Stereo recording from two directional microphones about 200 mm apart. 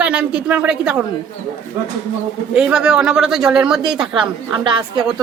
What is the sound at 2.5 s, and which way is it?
A woman's voice, 5° right (ahead or behind).